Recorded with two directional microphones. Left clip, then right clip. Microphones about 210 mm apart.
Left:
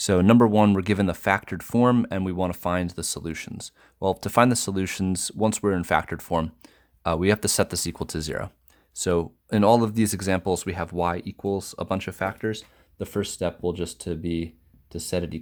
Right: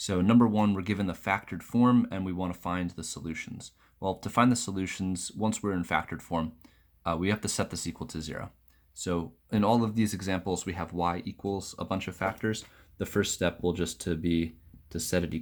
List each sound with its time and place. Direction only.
0.0 s speech: 50° left (ahead or behind); by 12.5 s 35° left (ahead or behind)
13.0 s speech: 20° left (ahead or behind)